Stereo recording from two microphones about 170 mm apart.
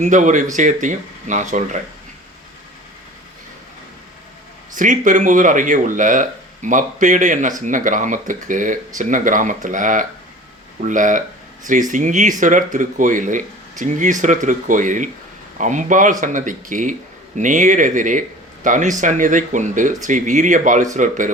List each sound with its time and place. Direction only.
0.0 s speech: 45° right (ahead or behind)
4.7 s speech: 50° right (ahead or behind)